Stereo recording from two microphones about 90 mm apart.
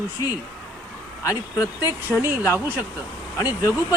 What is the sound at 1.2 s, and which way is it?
Speech, 40° left (ahead or behind).